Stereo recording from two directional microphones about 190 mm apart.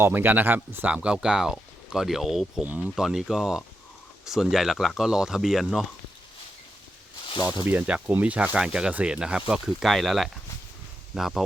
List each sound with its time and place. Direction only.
0.0 s speech: 10° right (ahead or behind)
7.3 s snake: 20° left (ahead or behind)
7.5 s speech: 10° right (ahead or behind)